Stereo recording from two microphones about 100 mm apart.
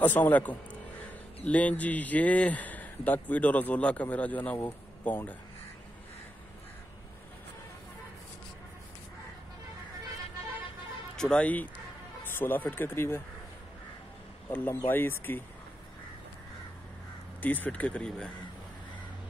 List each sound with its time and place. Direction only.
0.0 s a man's voice: 15° left (ahead or behind)
11.1 s a man's voice: 10° left (ahead or behind)
14.5 s speech: 20° left (ahead or behind)
17.4 s a man's voice: 15° left (ahead or behind)